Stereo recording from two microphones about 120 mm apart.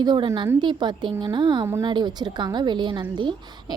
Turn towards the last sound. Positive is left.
turn(degrees=-45)  # may be behind; listen again after turning